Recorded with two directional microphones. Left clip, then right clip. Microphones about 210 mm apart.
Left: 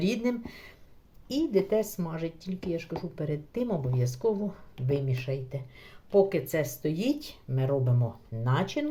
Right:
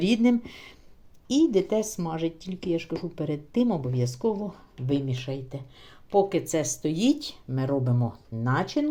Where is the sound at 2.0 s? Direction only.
30° right (ahead or behind).